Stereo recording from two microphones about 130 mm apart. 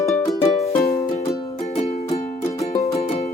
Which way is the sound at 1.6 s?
60° left (ahead or behind).